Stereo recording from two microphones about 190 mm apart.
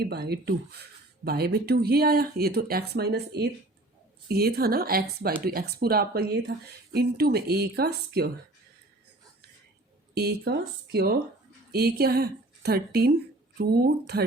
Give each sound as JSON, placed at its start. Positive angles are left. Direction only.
{"t": 0.0, "sound": "speech", "side_deg": -55}
{"t": 10.2, "sound": "speech", "side_deg": -55}